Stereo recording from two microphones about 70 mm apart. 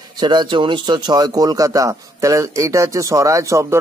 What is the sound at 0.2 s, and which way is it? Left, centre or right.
Speech, right.